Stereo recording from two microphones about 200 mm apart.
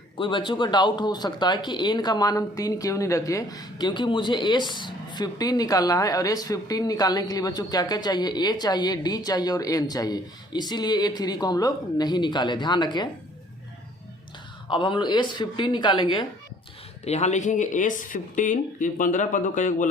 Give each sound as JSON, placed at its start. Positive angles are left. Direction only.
{"t": 0.2, "sound": "speech", "side_deg": 25}
{"t": 14.7, "sound": "speech", "side_deg": 25}
{"t": 17.1, "sound": "speech", "side_deg": 35}